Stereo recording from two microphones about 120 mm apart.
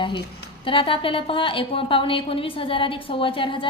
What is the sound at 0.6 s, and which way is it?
A woman's voice, 45° left (ahead or behind).